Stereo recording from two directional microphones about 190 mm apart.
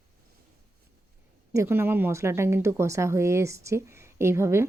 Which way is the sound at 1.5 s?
15° right (ahead or behind).